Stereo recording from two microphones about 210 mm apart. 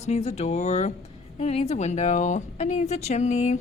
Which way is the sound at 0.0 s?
30° left (ahead or behind).